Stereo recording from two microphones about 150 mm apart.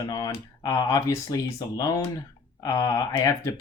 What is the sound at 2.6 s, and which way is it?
Speech, 25° left (ahead or behind).